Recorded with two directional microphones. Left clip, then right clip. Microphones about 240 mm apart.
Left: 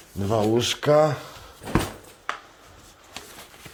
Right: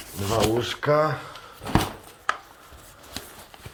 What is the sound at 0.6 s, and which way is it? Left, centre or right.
Speech, left.